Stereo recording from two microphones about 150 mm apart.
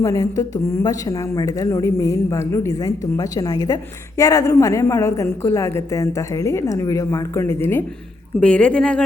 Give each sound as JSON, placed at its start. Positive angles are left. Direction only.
{"t": 0.0, "sound": "a woman's voice", "side_deg": 20}